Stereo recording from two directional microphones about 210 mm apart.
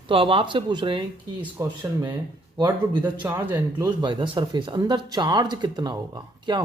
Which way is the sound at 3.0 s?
10° right (ahead or behind).